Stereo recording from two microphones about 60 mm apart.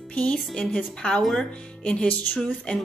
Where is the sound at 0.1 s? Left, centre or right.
Left.